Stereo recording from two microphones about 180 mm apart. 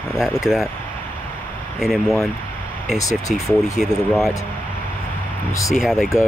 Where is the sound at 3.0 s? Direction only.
20° left (ahead or behind).